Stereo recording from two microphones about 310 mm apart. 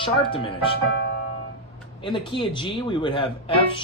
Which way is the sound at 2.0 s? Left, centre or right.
Centre.